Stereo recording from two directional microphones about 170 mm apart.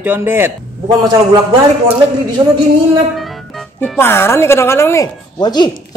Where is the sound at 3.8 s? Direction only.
10° left (ahead or behind).